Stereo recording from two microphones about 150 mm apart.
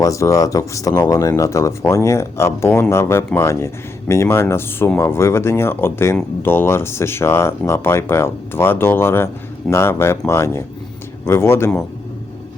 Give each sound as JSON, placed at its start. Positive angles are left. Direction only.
{"t": 0.0, "sound": "speech", "side_deg": 20}